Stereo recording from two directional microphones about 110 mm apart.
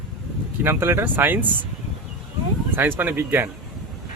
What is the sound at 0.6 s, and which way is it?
Speech, 20° right (ahead or behind).